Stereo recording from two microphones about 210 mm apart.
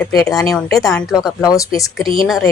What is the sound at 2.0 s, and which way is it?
Speech, 25° right (ahead or behind).